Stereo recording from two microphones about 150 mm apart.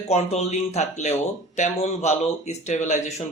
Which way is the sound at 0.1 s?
45° left (ahead or behind).